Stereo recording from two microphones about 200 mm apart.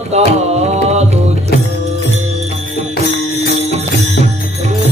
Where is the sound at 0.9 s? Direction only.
35° right (ahead or behind).